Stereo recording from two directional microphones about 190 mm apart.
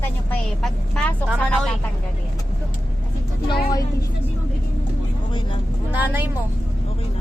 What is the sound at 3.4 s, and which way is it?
Speech, 20° left (ahead or behind).